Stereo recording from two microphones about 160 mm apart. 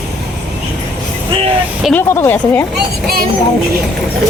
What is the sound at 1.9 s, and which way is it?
Speech, 15° left (ahead or behind).